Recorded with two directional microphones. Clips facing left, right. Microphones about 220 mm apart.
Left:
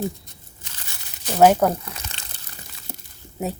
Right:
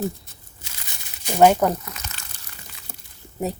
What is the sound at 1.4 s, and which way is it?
Speech, 5° left (ahead or behind).